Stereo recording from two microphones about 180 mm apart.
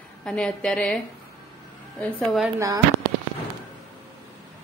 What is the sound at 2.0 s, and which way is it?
Speech, 5° left (ahead or behind).